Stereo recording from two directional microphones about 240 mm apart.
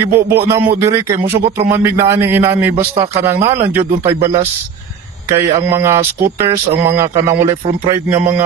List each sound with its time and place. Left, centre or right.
0.0 s speech: centre
2.7 s a man's voice: right
5.5 s speech: centre